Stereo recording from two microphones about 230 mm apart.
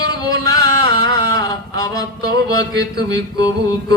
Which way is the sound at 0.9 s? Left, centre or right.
Right.